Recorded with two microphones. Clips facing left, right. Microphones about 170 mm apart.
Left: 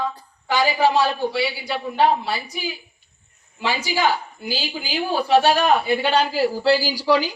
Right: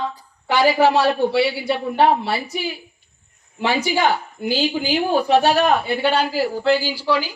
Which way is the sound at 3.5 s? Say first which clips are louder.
Right 4 dB; 60° right (ahead or behind).